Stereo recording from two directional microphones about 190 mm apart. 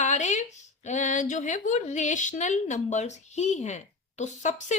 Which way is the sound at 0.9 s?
40° left (ahead or behind).